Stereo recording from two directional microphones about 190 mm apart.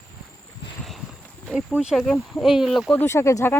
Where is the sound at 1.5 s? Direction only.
5° right (ahead or behind).